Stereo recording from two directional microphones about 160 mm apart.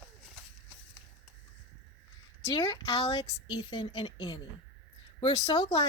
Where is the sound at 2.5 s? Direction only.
35° left (ahead or behind).